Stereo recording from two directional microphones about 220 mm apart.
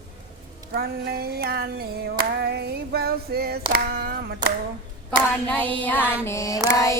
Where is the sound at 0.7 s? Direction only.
45° right (ahead or behind).